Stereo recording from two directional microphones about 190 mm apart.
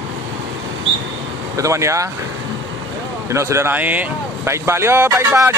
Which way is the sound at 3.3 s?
15° right (ahead or behind).